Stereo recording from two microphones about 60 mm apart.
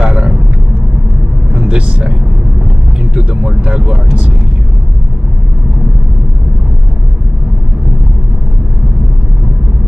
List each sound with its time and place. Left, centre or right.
0.0 s vehicle: centre
1.7 s vehicle: centre